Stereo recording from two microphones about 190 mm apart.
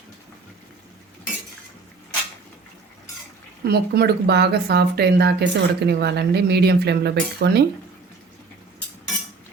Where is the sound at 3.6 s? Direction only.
55° right (ahead or behind).